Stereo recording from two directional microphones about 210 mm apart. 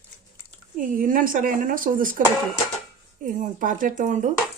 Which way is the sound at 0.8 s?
40° right (ahead or behind).